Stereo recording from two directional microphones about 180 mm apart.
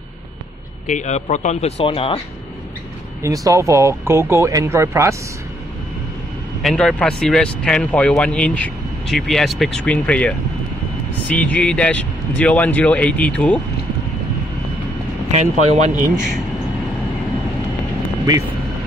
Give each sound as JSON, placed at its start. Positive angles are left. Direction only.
{"t": 0.8, "sound": "speech", "side_deg": 40}
{"t": 3.2, "sound": "speech", "side_deg": -15}
{"t": 6.6, "sound": "speech", "side_deg": 5}
{"t": 15.3, "sound": "speech", "side_deg": -40}